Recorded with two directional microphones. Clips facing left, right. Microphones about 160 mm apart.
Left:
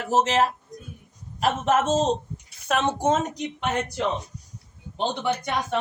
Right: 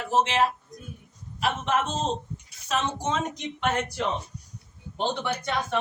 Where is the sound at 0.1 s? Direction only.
40° left (ahead or behind).